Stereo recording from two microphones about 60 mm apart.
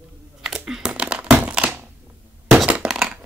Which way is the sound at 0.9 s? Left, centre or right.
Centre.